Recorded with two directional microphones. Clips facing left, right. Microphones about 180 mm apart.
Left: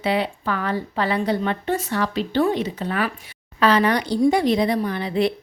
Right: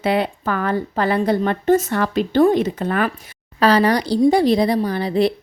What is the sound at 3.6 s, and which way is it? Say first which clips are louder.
A woman's voice: right 3 dB; 35° right (ahead or behind).